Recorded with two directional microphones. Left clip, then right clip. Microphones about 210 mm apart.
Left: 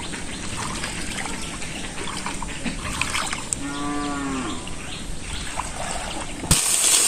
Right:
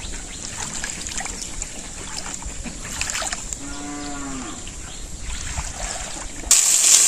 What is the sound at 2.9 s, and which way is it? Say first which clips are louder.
Trickle: left 1 dB; 45° right (ahead or behind).